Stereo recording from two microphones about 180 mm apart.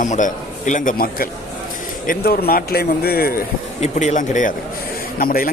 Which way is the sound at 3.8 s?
40° left (ahead or behind).